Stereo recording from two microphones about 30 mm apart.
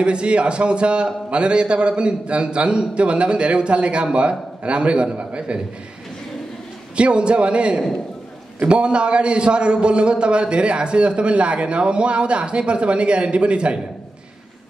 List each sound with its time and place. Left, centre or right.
0.0 s a man's voice: right
7.0 s a man's voice: right